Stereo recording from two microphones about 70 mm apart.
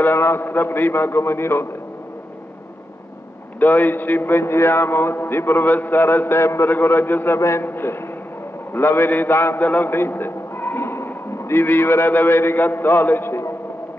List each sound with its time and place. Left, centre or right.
0.0 s a man's voice: left
3.5 s a man's voice: left
7.3 s a man's voice: left
7.6 s a man's voice: left